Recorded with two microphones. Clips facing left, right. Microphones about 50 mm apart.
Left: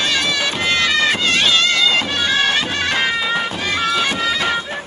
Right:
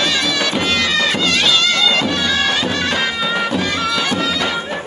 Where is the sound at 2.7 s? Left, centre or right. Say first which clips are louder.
Even; left.